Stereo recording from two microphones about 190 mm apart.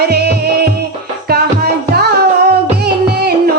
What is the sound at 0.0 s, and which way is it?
Music, 60° right (ahead or behind).